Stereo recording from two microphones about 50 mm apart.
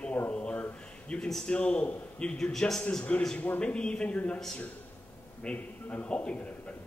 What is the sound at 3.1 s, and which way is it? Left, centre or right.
A man's voice, left.